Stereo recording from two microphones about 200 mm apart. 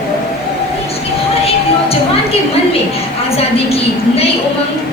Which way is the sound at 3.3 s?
30° left (ahead or behind).